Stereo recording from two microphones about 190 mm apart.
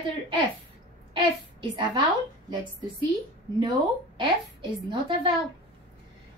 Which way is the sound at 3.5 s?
25° right (ahead or behind).